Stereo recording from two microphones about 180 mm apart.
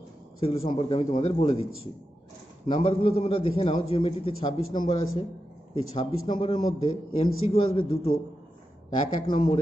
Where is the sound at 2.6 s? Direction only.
30° left (ahead or behind).